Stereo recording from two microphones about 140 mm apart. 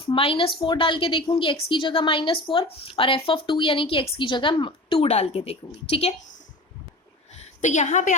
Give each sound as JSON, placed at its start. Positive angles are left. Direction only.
{"t": 0.0, "sound": "a woman's voice", "side_deg": 40}
{"t": 7.6, "sound": "a woman's voice", "side_deg": 60}